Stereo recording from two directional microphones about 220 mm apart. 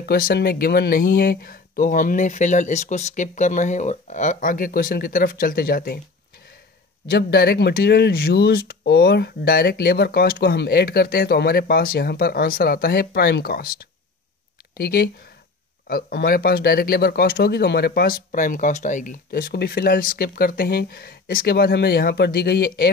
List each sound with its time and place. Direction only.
0.0 s speech: 45° left (ahead or behind)
7.1 s speech: 45° left (ahead or behind)